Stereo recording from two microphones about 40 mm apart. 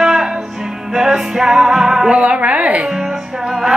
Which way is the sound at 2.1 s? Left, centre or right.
Right.